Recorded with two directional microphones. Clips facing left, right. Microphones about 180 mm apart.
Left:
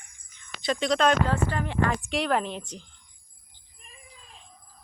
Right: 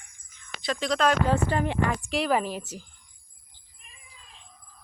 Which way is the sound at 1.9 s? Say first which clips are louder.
Right 1 dB; centre (ahead or behind).